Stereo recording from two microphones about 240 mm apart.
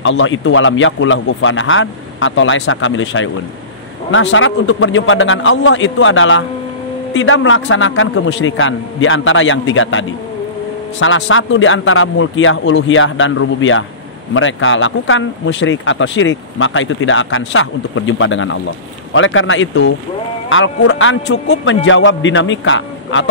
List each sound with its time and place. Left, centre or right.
0.0 s a man's voice: left